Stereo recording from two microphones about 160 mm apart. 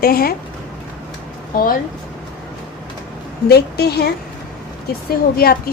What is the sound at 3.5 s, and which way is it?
Speech, 85° left.